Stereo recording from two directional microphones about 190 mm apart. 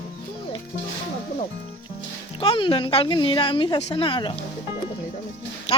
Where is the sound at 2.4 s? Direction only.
25° left (ahead or behind).